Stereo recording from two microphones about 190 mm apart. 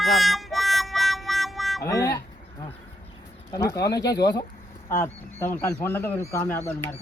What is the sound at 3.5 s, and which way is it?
Speech, 15° left (ahead or behind).